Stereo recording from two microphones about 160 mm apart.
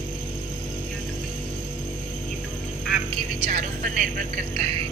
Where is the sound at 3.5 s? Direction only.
55° right (ahead or behind).